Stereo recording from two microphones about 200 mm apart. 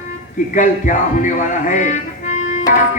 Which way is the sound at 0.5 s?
40° left (ahead or behind).